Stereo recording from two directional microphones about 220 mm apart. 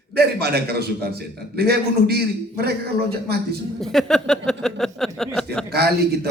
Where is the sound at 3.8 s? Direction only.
Centre (ahead or behind).